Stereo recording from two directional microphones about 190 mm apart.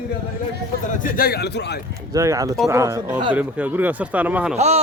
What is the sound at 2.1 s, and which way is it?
Speech, 15° right (ahead or behind).